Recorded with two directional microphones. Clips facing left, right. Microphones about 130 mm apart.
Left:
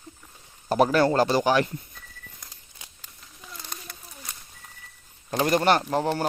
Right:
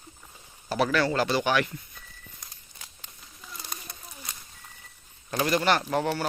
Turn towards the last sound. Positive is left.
turn(degrees=40)  # may be behind; listen again after turning